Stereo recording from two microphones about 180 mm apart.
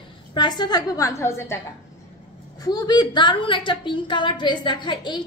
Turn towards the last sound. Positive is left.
turn(degrees=25)  # may be behind; listen again after turning